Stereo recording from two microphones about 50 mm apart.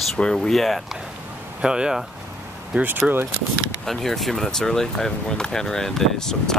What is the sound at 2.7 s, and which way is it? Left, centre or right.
Speech, right.